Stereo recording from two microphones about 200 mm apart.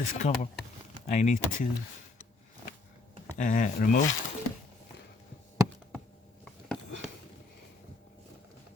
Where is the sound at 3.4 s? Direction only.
40° left (ahead or behind).